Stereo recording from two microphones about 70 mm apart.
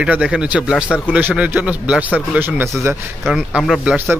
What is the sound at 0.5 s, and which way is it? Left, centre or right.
Speech, centre.